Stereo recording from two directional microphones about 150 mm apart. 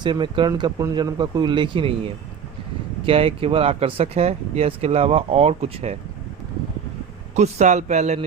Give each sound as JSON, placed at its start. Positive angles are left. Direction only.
{"t": 0.0, "sound": "speech", "side_deg": -30}
{"t": 7.3, "sound": "speech", "side_deg": -50}